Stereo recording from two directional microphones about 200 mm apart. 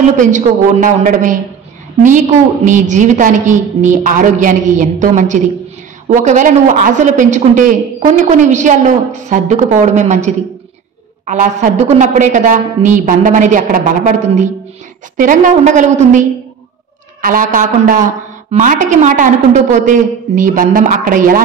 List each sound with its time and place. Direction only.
0.2 s speech: 40° right (ahead or behind)